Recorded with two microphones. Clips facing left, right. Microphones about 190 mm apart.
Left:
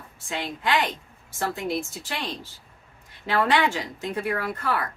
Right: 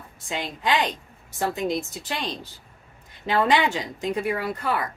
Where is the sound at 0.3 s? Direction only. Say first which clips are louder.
Right 1 dB; 20° right (ahead or behind).